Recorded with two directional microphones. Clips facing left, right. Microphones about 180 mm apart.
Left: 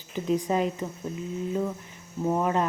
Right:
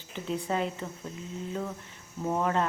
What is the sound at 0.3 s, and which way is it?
Speech, 15° left (ahead or behind).